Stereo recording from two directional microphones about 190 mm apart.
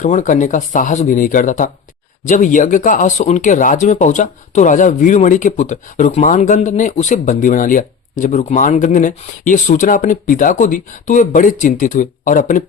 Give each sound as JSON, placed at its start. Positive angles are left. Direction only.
{"t": 0.0, "sound": "speech", "side_deg": 40}